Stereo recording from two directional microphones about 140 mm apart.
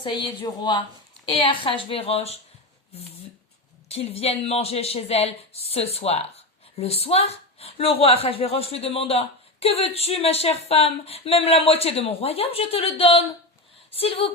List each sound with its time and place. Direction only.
0.0 s a woman's voice: 35° left (ahead or behind)
3.8 s a woman's voice: 45° left (ahead or behind)